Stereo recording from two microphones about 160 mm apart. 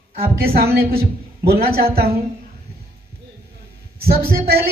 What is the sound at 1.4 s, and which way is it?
Speech, 70° right (ahead or behind).